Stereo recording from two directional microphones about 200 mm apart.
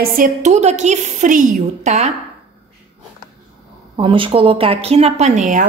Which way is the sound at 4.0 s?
25° right (ahead or behind).